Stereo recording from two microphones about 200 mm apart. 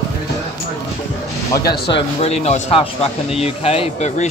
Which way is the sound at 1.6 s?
50° left (ahead or behind).